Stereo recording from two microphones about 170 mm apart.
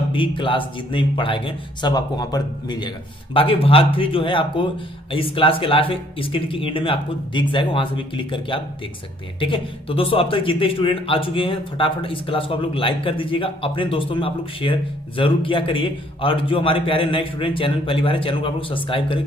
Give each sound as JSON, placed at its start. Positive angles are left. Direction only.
{"t": 0.1, "sound": "a man's voice", "side_deg": 30}